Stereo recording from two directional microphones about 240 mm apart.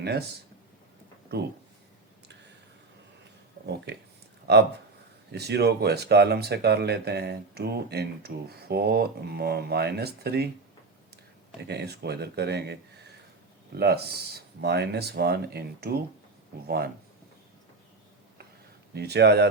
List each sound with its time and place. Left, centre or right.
4.5 s speech: right
11.7 s speech: right
18.9 s speech: right